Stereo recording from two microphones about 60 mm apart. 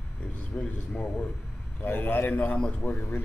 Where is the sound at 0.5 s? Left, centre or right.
Centre.